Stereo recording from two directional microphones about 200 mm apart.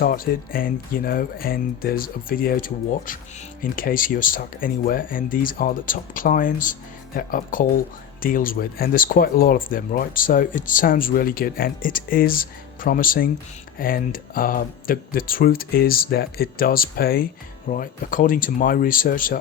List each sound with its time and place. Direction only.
0.0 s speech: 45° left (ahead or behind)